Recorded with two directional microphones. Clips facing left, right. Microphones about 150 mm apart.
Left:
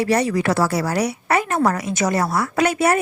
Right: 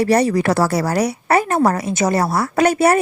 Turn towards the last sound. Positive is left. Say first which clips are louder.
# right 4 dB
turn(degrees=-40)  # may be behind; listen again after turning